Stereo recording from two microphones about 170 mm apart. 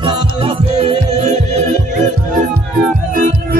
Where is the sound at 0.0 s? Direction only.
30° right (ahead or behind).